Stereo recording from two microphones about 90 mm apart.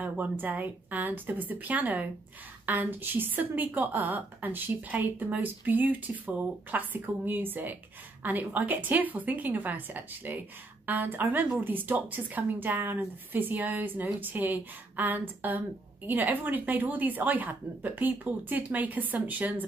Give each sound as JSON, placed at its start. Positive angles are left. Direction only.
{"t": 0.0, "sound": "speech", "side_deg": -20}